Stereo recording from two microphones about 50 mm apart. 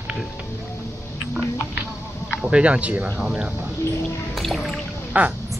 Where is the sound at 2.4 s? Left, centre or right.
Right.